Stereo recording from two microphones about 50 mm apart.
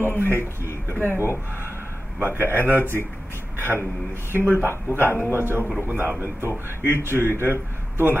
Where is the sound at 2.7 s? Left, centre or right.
Left.